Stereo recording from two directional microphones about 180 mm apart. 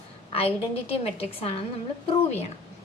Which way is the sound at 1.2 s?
30° left (ahead or behind).